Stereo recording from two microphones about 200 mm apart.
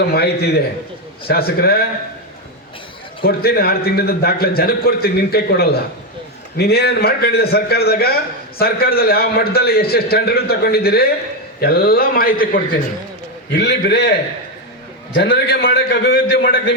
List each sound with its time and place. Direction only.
0.0 s a man's voice: 50° left (ahead or behind)
3.2 s a man's voice: 50° left (ahead or behind)
13.5 s a man's voice: 60° left (ahead or behind)